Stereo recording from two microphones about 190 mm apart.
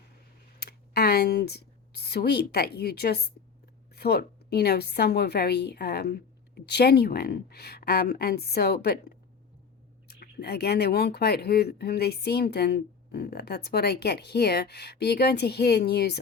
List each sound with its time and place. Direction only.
0.6 s speech: 55° left (ahead or behind)
10.1 s speech: 55° left (ahead or behind)